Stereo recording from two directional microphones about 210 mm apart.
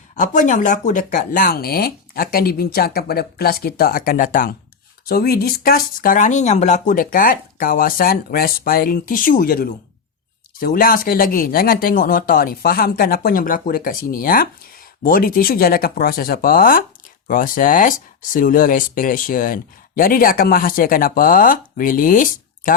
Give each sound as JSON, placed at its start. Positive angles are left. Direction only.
{"t": 0.2, "sound": "speech", "side_deg": 35}